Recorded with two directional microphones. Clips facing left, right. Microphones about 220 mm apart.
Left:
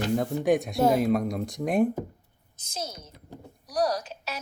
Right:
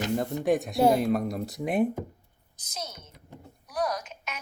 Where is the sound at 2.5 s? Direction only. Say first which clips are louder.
Left 3 dB; 30° left (ahead or behind).